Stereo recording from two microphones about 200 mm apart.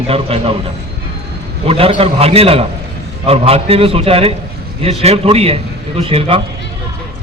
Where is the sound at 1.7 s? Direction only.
30° right (ahead or behind).